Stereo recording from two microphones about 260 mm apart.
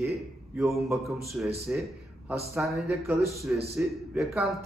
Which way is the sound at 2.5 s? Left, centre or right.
Centre.